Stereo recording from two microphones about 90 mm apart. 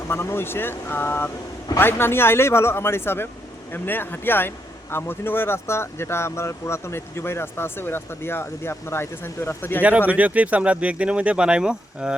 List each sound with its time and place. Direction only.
0.1 s speech: 25° left (ahead or behind)
10.1 s speech: 15° right (ahead or behind)